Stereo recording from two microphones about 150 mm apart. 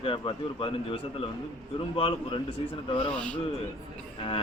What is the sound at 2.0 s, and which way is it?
Speech, 35° left (ahead or behind).